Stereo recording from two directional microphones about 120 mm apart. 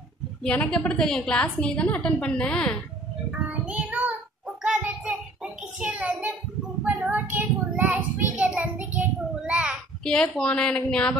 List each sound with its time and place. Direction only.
0.4 s a woman's voice: 10° left (ahead or behind)
3.3 s child singing: 10° right (ahead or behind)
7.0 s a sound: 20° right (ahead or behind)
8.2 s child singing: 10° right (ahead or behind)
10.0 s a woman's voice: 5° left (ahead or behind)